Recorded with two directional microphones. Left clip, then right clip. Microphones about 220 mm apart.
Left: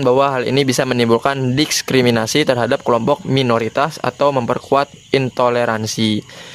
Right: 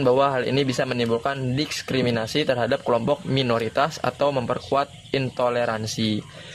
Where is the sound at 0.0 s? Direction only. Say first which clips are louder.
Left 5 dB; 25° left (ahead or behind).